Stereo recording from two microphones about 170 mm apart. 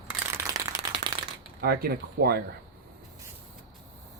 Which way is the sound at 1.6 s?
65° right (ahead or behind).